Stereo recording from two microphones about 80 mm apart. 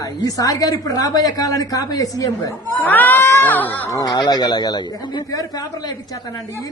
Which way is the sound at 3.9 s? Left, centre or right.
Left.